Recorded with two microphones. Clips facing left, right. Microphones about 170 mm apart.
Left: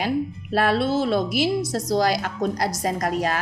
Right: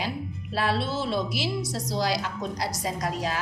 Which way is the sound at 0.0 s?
55° left (ahead or behind).